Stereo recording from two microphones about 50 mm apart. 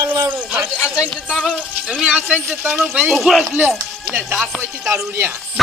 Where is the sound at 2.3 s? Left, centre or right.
Right.